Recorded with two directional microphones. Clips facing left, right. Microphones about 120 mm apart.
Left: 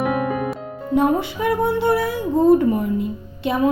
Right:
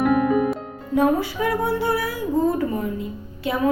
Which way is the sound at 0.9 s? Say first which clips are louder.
Left 1 dB; 20° left (ahead or behind).